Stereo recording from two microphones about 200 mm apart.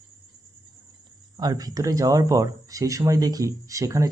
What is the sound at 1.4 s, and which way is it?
Speech, 20° right (ahead or behind).